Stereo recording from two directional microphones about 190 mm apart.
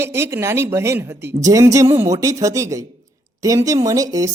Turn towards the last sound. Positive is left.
turn(degrees=-20)  # may be behind; listen again after turning